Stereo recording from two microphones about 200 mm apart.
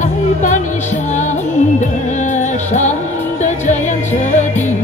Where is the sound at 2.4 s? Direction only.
35° left (ahead or behind).